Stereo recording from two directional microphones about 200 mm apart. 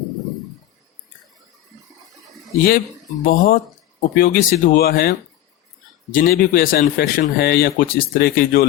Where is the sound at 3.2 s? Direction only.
45° left (ahead or behind).